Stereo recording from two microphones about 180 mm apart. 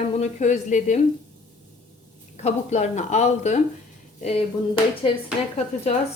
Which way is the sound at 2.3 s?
40° left (ahead or behind).